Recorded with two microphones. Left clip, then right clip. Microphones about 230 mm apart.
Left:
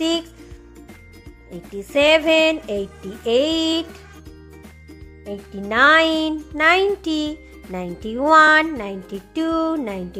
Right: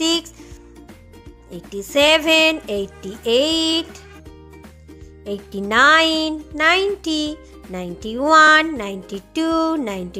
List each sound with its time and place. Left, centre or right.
1.5 s speech: centre
5.2 s speech: centre